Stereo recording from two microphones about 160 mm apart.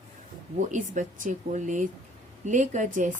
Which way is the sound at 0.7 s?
50° right (ahead or behind).